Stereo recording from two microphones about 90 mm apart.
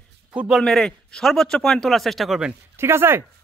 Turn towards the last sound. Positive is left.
turn(degrees=-25)  # may be behind; listen again after turning